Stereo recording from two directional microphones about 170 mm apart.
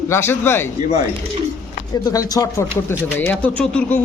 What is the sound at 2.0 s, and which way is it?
Speech, 20° left (ahead or behind).